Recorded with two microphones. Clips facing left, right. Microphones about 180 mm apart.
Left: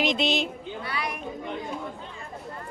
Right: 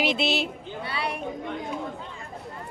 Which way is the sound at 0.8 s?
30° right (ahead or behind).